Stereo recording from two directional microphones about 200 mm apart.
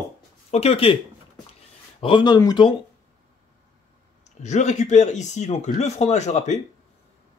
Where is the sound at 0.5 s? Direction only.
30° left (ahead or behind).